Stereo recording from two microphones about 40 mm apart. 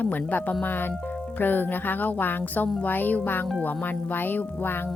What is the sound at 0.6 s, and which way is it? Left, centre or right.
Speech, left.